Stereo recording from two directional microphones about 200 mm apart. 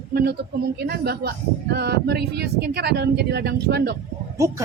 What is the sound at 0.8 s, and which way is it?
Speech, 50° right (ahead or behind).